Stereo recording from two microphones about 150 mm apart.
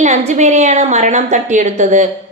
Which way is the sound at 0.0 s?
50° right (ahead or behind).